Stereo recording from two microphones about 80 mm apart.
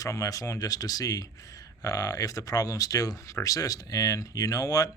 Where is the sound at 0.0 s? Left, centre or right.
Left.